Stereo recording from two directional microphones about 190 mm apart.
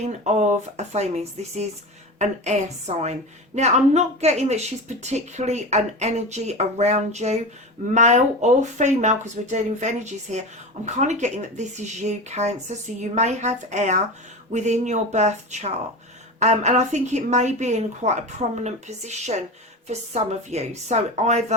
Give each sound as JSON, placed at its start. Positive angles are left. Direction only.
{"t": 0.3, "sound": "a woman's voice", "side_deg": -35}